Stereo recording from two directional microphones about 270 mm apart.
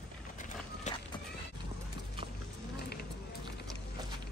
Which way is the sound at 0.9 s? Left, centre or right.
Left.